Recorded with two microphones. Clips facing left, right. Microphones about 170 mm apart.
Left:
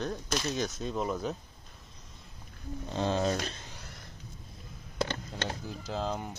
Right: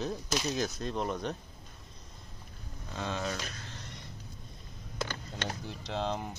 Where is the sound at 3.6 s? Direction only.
5° left (ahead or behind).